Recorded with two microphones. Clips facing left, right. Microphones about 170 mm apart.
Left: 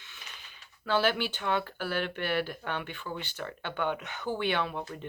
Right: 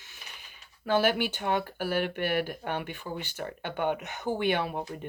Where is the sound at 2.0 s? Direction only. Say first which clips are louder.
Even; 50° right (ahead or behind).